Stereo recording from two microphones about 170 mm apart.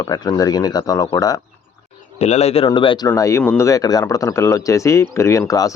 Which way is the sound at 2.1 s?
40° left (ahead or behind).